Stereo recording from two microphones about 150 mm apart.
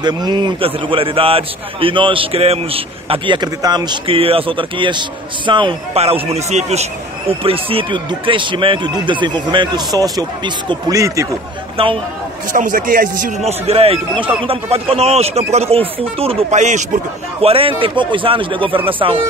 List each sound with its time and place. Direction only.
0.0 s a man's voice: 30° right (ahead or behind)
11.7 s speech: 35° right (ahead or behind)
12.5 s a man's voice: 65° right (ahead or behind); by 19.1 s 35° right (ahead or behind)